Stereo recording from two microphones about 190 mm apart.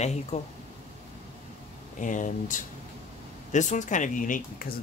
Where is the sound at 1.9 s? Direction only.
40° left (ahead or behind).